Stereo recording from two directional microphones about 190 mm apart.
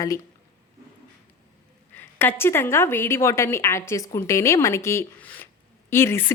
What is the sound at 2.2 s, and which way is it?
A woman's voice, 10° left (ahead or behind).